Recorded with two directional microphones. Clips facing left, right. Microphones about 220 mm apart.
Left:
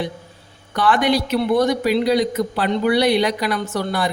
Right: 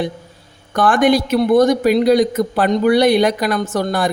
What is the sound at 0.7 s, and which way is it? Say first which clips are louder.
A man's voice: right 4 dB; 50° right (ahead or behind).